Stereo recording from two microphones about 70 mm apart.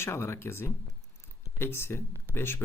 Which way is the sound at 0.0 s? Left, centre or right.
Left.